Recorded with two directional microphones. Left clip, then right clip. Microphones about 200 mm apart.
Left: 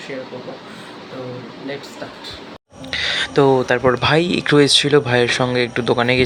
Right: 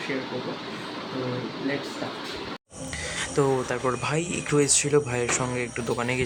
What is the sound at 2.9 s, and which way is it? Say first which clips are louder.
Speech: left 11 dB; 15° left (ahead or behind).